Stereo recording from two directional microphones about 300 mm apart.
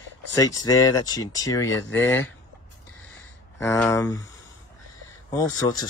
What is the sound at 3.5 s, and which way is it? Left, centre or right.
Speech, centre.